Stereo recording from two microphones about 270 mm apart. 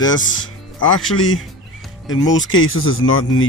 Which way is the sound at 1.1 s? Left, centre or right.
Left.